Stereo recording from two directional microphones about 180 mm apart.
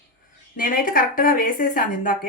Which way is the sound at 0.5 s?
50° left (ahead or behind).